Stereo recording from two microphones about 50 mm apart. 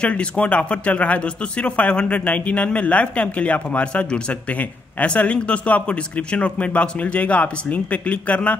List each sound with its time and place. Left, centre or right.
0.0 s speech: left